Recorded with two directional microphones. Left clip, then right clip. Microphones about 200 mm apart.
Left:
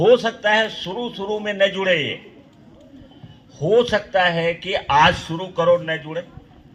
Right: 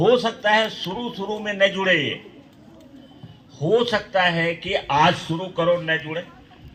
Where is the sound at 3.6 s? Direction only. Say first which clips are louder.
Left 3 dB; 20° left (ahead or behind).